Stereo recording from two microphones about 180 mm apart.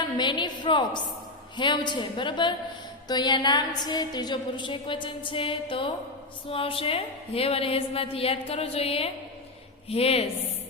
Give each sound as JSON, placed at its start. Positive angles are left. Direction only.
{"t": 0.2, "sound": "a woman's voice", "side_deg": 25}